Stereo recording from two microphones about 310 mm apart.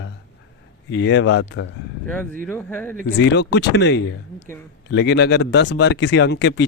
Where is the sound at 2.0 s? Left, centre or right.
Centre.